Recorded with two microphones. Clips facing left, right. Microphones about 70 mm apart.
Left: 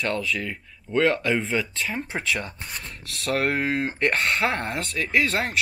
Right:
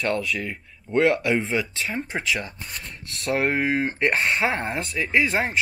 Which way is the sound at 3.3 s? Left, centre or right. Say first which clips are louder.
Right 1 dB; centre.